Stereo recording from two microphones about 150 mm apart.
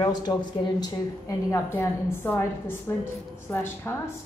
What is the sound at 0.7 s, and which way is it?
A woman's voice, 25° left (ahead or behind).